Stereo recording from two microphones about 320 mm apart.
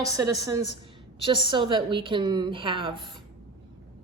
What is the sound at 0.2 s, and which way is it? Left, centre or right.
A woman's voice, centre.